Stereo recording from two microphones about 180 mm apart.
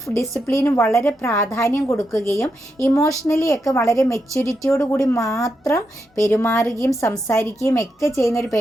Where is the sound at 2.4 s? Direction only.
15° left (ahead or behind).